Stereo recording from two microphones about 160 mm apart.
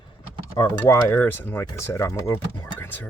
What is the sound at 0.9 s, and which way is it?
Speech, 15° left (ahead or behind).